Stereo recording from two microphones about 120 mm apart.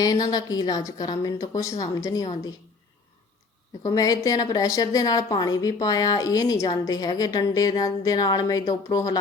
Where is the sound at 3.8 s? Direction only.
30° left (ahead or behind).